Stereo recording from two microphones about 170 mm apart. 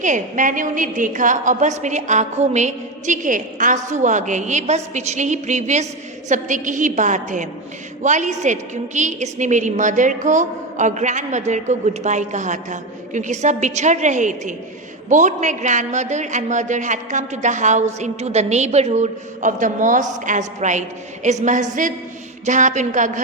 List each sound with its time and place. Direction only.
0.0 s a woman's voice: 50° right (ahead or behind)